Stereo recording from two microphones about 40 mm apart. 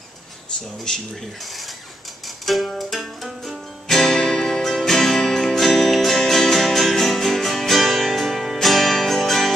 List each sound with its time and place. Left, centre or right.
0.9 s speech: centre
1.4 s filing: centre
2.2 s music: centre
3.8 s music: centre